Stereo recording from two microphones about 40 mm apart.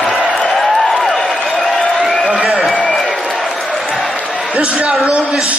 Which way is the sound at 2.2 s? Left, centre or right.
Centre.